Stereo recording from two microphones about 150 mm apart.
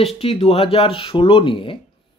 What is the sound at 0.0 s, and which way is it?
Speech, 40° left (ahead or behind).